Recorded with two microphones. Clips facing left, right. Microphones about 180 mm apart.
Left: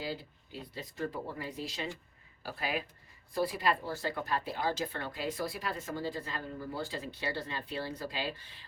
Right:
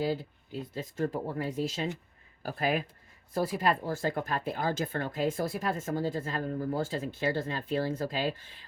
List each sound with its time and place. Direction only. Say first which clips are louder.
0.0 s speech: right 8 dB; 45° right (ahead or behind)